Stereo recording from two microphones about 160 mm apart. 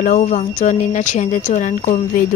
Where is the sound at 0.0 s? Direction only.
50° left (ahead or behind).